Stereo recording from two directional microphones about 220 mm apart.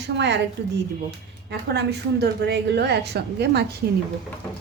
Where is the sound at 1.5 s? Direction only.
50° right (ahead or behind).